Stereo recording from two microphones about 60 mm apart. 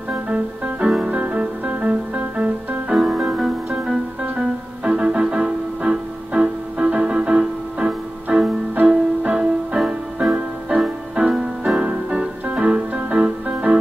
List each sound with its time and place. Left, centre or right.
0.7 s music: centre
3.0 s music: centre
11.1 s piano: centre